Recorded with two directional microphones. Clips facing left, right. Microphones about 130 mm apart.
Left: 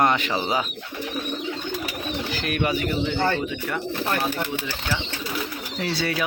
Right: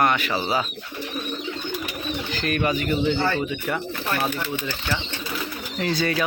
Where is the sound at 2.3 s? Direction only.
10° left (ahead or behind).